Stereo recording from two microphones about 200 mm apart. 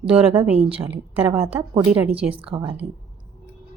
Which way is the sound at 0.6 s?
30° right (ahead or behind).